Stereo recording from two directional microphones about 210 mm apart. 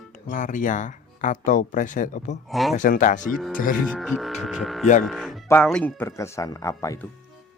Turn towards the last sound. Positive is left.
turn(degrees=15)  # may be behind; listen again after turning